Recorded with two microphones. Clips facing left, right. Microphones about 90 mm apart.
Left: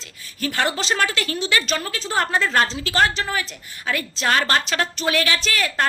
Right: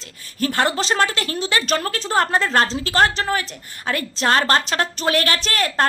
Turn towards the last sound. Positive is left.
turn(degrees=-40)  # may be behind; listen again after turning